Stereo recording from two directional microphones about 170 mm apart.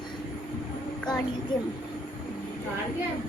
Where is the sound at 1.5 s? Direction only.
25° left (ahead or behind).